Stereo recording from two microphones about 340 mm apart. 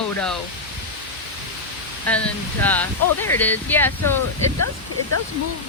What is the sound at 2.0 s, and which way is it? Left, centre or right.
Speech, centre.